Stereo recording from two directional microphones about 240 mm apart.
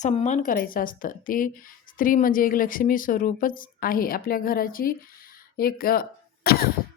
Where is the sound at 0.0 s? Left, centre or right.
Left.